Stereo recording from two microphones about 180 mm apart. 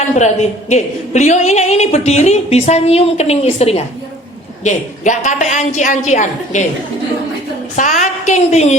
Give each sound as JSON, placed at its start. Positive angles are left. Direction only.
{"t": 0.0, "sound": "a woman's voice", "side_deg": 40}
{"t": 7.8, "sound": "a woman's voice", "side_deg": 45}